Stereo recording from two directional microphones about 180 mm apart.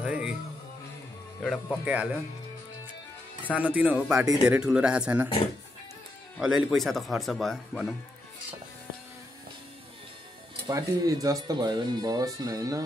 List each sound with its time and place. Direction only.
0.0 s music: 5° right (ahead or behind)
1.4 s speech: 5° left (ahead or behind)
1.9 s speech: 10° right (ahead or behind)
3.5 s speech: 5° right (ahead or behind)
6.3 s speech: centre (ahead or behind)
10.7 s speech: 20° right (ahead or behind)